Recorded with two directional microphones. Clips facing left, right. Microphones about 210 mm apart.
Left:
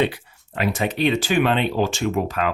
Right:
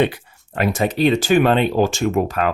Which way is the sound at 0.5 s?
45° right (ahead or behind).